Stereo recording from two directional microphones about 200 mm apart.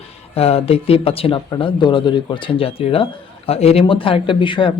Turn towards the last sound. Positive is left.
turn(degrees=25)  # may be behind; listen again after turning